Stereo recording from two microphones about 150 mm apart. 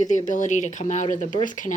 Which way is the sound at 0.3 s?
55° left (ahead or behind).